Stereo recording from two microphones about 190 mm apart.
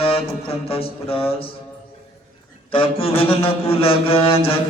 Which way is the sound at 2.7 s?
30° left (ahead or behind).